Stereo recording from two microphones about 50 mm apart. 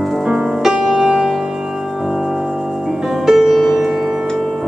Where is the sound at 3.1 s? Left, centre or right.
Centre.